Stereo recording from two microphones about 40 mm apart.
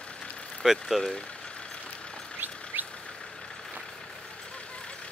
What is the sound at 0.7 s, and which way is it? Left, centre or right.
Speech, centre.